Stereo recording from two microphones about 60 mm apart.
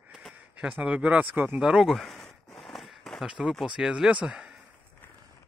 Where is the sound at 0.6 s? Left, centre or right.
Right.